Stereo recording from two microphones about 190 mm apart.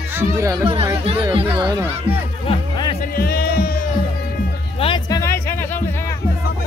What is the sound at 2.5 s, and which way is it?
Music, 25° left (ahead or behind).